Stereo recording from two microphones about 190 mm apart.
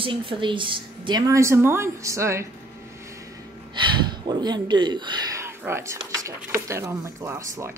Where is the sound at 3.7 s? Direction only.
25° right (ahead or behind).